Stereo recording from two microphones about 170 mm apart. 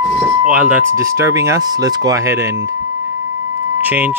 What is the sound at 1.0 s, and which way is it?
Speech, 15° right (ahead or behind).